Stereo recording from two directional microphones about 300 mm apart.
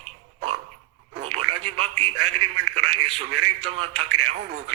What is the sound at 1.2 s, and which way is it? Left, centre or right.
Radio, right.